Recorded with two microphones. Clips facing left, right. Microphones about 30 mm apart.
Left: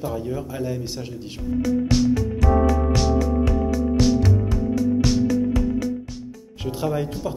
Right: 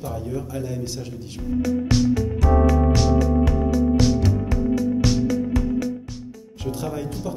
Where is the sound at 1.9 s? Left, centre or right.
Centre.